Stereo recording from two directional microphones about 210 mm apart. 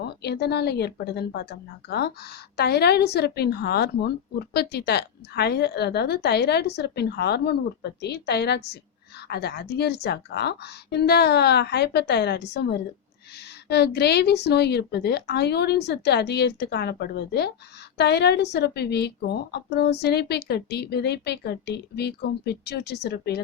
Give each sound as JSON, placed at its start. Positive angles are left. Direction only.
{"t": 0.0, "sound": "a woman's voice", "side_deg": 50}